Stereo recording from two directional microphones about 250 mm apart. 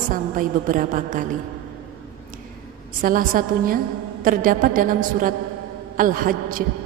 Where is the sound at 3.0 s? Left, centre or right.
Right.